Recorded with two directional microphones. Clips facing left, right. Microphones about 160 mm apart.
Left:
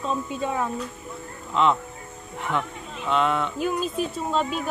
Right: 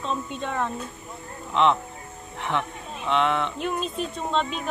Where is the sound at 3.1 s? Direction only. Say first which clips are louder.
Even; centre (ahead or behind).